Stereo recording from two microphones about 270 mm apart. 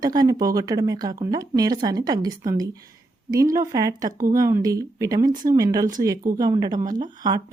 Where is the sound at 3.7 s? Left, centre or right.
Centre.